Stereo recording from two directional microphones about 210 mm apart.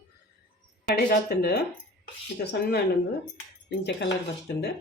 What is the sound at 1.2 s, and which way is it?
Speech, 50° left (ahead or behind).